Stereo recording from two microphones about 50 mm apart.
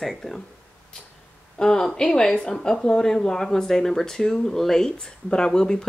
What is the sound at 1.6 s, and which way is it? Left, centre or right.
Speech, centre.